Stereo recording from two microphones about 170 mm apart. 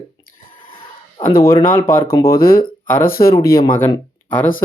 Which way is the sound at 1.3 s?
60° left (ahead or behind).